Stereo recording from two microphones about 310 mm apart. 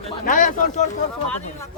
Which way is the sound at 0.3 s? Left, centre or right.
Left.